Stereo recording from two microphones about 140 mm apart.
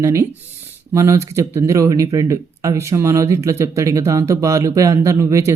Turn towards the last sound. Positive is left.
turn(degrees=-20)  # may be behind; listen again after turning